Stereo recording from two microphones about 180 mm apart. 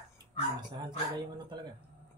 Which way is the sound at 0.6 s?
25° right (ahead or behind).